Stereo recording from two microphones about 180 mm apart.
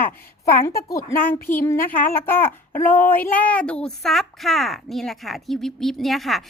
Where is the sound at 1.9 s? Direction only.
50° left (ahead or behind).